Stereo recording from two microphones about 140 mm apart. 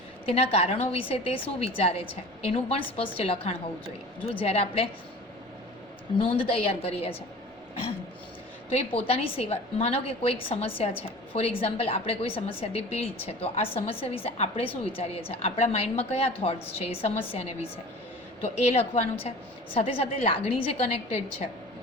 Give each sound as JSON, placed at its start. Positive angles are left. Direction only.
{"t": 0.3, "sound": "a woman's voice", "side_deg": 45}
{"t": 6.1, "sound": "a woman's voice", "side_deg": 40}
{"t": 8.7, "sound": "a woman's voice", "side_deg": 45}